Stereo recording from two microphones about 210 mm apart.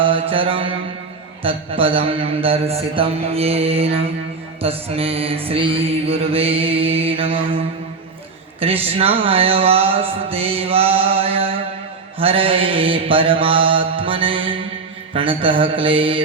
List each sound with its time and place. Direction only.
0.0 s mantra: 25° right (ahead or behind)
1.5 s music: 25° right (ahead or behind)
8.6 s music: 30° right (ahead or behind)